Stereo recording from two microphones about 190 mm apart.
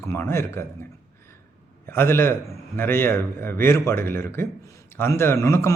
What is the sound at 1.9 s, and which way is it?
Speech, 10° left (ahead or behind).